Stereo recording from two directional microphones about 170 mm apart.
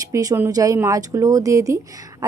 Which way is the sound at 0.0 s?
20° right (ahead or behind).